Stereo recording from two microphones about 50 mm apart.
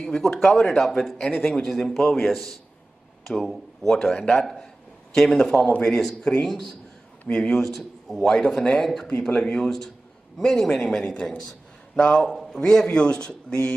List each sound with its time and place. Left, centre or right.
0.1 s speech: centre
1.4 s speech: centre
1.7 s speech: centre
7.6 s a man's voice: centre